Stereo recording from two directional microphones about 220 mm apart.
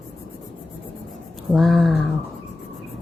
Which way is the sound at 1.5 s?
Centre (ahead or behind).